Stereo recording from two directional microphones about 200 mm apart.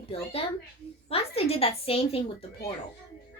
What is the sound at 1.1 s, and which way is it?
A woman's voice, 30° left (ahead or behind).